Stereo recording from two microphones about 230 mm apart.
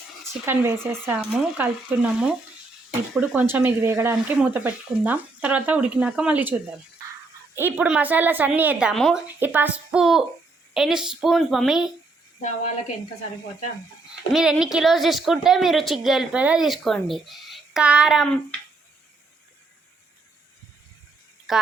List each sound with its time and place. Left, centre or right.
0.4 s a woman's voice: centre
14.3 s a woman's voice: centre
21.5 s a woman's voice: centre